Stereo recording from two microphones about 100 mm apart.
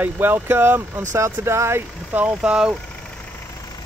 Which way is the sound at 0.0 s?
20° right (ahead or behind).